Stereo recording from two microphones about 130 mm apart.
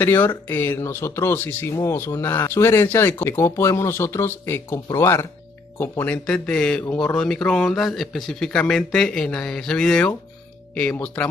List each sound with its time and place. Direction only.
0.0 s speech: 15° left (ahead or behind)